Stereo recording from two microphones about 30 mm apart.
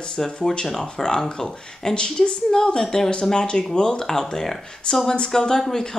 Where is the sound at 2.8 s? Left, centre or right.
Centre.